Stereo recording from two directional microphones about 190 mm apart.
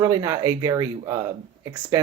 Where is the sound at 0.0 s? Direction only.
15° right (ahead or behind).